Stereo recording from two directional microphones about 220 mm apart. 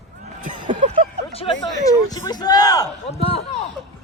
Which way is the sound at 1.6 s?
15° left (ahead or behind).